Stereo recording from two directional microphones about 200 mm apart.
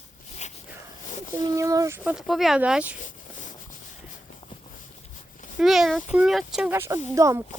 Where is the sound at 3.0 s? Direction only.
40° left (ahead or behind).